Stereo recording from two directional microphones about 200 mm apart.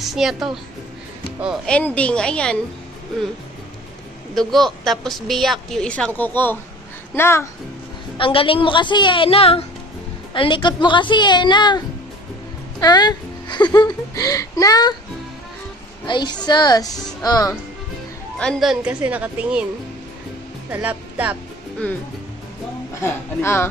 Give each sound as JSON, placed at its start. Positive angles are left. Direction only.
{"t": 0.0, "sound": "a woman's voice", "side_deg": 0}
{"t": 1.8, "sound": "a woman's voice", "side_deg": 5}
{"t": 4.4, "sound": "a woman's voice", "side_deg": 0}
{"t": 8.2, "sound": "speech", "side_deg": 25}
{"t": 12.8, "sound": "speech", "side_deg": 20}
{"t": 16.1, "sound": "speech", "side_deg": 20}
{"t": 18.4, "sound": "a woman's voice", "side_deg": 0}
{"t": 20.7, "sound": "a woman's voice", "side_deg": -10}
{"t": 23.0, "sound": "a woman's voice", "side_deg": 10}